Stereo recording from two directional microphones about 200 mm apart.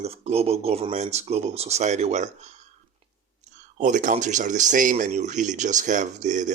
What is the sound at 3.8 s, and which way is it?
Speech, 40° right (ahead or behind).